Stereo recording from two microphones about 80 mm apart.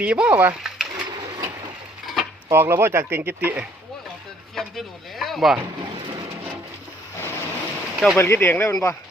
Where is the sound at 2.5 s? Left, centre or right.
Right.